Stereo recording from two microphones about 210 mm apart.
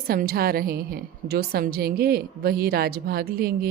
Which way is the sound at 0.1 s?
45° right (ahead or behind).